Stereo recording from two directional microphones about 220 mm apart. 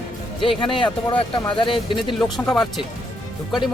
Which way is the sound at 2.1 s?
Centre (ahead or behind).